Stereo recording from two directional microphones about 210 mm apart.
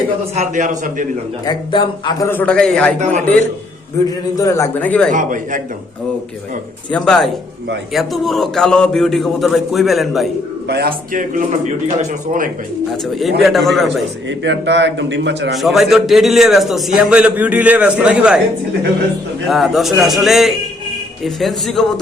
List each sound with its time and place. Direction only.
0.3 s a man's voice: 35° right (ahead or behind)
1.5 s a man's voice: 20° left (ahead or behind); by 2.9 s 5° left (ahead or behind)
3.0 s a man's voice: 35° right (ahead or behind)
4.4 s a man's voice: 15° left (ahead or behind)
5.1 s a man's voice: 40° right (ahead or behind)
6.9 s a man's voice: centre (ahead or behind)
10.7 s a man's voice: 45° right (ahead or behind)
13.4 s a man's voice: centre (ahead or behind)
14.3 s a man's voice: 55° right (ahead or behind)
15.5 s a man's voice: centre (ahead or behind)
19.5 s a man's voice: centre (ahead or behind)